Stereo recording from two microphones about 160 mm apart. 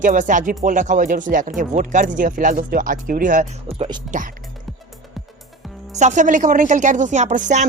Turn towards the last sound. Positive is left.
turn(degrees=-50)  # may be behind; listen again after turning